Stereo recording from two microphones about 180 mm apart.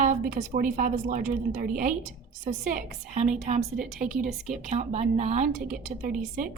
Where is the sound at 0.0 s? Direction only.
45° right (ahead or behind).